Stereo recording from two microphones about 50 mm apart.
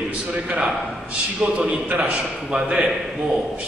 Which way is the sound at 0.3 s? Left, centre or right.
Right.